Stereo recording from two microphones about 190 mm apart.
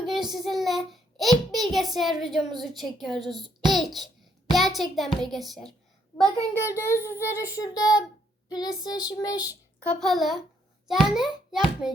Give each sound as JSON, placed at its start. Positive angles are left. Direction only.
{"t": 0.0, "sound": "child singing", "side_deg": 0}
{"t": 1.7, "sound": "a woman's voice", "side_deg": 0}
{"t": 6.1, "sound": "a child's voice", "side_deg": 10}
{"t": 8.4, "sound": "child singing", "side_deg": 20}
{"t": 9.8, "sound": "a woman's voice", "side_deg": 5}